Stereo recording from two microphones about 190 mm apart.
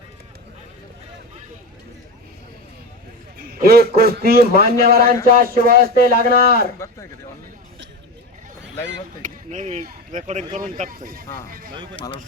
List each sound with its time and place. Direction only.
3.3 s a man's voice: 55° right (ahead or behind)
9.2 s a man's voice: 40° right (ahead or behind)
11.9 s speech: 30° left (ahead or behind)